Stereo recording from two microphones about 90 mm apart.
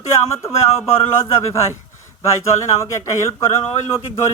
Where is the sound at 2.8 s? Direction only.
35° left (ahead or behind).